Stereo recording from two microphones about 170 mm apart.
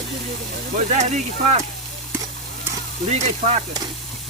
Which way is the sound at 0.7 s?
45° right (ahead or behind).